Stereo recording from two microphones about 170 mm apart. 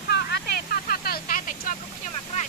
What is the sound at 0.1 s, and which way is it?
Vehicle, 70° left (ahead or behind).